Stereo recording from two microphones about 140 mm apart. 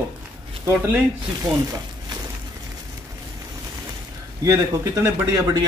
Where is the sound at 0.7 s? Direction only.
15° right (ahead or behind).